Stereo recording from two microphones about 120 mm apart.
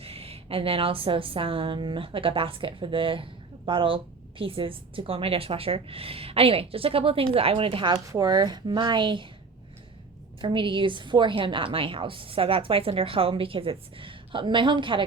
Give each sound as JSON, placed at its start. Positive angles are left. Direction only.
{"t": 0.0, "sound": "a woman's voice", "side_deg": -55}
{"t": 8.0, "sound": "speech", "side_deg": -30}
{"t": 10.4, "sound": "a woman's voice", "side_deg": -45}